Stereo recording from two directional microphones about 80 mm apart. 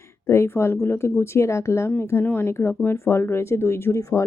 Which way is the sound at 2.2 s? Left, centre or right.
Left.